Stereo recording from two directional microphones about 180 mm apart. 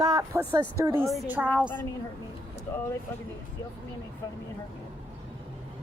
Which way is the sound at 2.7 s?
15° left (ahead or behind).